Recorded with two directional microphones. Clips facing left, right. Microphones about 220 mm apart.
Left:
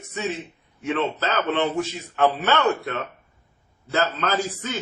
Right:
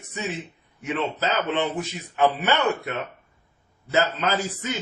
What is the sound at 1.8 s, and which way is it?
Speech, 15° right (ahead or behind).